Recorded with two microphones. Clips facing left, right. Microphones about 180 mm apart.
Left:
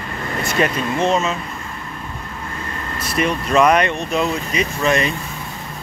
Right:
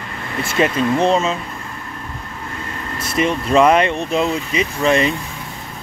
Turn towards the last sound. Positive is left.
turn(degrees=-25)  # may be behind; listen again after turning